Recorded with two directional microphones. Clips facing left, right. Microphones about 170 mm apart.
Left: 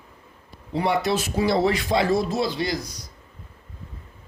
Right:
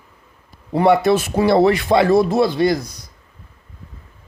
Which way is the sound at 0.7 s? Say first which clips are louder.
Right 8 dB; 55° right (ahead or behind).